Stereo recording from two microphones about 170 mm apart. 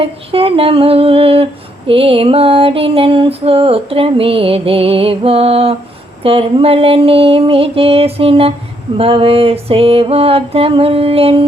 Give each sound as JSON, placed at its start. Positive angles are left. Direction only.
{"t": 0.0, "sound": "music", "side_deg": -35}